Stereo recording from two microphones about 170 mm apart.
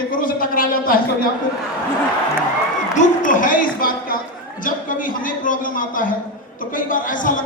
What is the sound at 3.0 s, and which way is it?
A man's voice, 50° left (ahead or behind).